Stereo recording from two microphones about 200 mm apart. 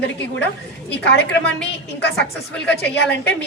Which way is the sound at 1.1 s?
60° left (ahead or behind).